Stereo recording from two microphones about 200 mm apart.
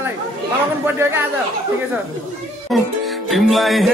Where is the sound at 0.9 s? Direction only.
10° right (ahead or behind).